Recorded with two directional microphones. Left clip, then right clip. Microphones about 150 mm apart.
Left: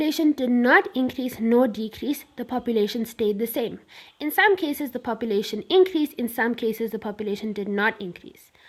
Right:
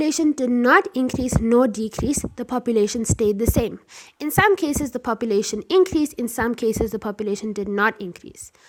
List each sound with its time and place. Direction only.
0.0 s speech: 30° right (ahead or behind)